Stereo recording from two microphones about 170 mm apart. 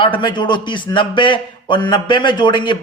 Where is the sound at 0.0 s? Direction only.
30° left (ahead or behind).